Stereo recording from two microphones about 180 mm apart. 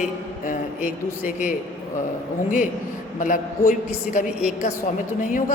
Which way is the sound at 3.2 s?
45° left (ahead or behind).